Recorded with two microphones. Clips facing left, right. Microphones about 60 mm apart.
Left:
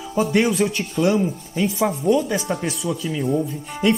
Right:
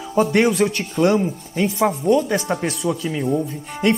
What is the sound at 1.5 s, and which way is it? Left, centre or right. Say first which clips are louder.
A man's voice: right 2 dB; right.